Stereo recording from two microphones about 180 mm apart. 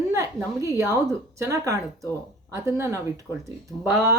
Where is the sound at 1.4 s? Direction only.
15° right (ahead or behind).